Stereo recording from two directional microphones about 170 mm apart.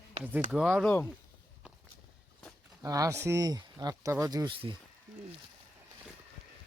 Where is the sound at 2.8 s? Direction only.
20° right (ahead or behind).